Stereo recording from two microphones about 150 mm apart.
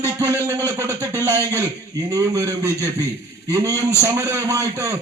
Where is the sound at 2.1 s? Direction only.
20° right (ahead or behind).